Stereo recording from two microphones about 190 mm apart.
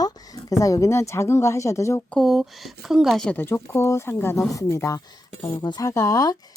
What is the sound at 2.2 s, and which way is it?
Speech, centre (ahead or behind).